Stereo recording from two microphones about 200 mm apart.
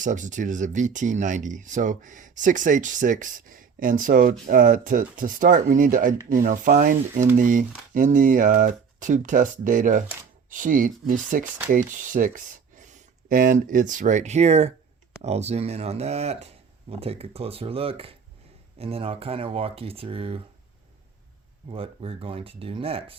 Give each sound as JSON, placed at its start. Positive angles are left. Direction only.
{"t": 0.0, "sound": "speech", "side_deg": -40}
{"t": 21.7, "sound": "speech", "side_deg": -25}